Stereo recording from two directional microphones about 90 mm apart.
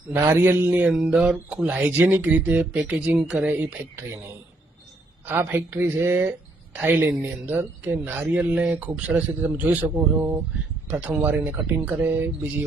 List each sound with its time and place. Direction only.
0.1 s speech: 25° right (ahead or behind)
5.2 s speech: 20° right (ahead or behind)